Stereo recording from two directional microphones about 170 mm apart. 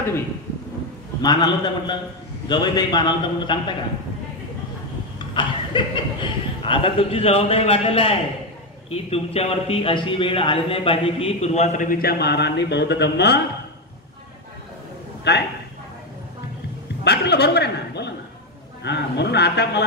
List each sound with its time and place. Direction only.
1.2 s a man's voice: 25° left (ahead or behind)
5.2 s a man's voice: 30° left (ahead or behind); by 13.4 s 80° left
15.3 s a man's voice: 75° left (ahead or behind)
17.0 s chuckle: 75° left (ahead or behind)
18.8 s a man's voice: 85° left